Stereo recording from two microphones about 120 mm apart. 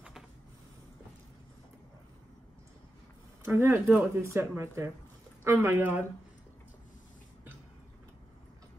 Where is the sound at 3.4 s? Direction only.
20° right (ahead or behind).